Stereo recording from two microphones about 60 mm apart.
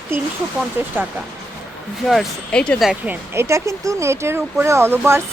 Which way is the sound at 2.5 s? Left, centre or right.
Centre.